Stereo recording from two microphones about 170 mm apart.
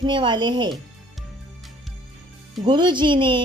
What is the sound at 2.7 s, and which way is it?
Speech, 25° right (ahead or behind).